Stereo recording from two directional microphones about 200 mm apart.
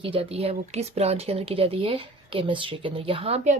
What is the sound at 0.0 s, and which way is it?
Speech, 30° right (ahead or behind).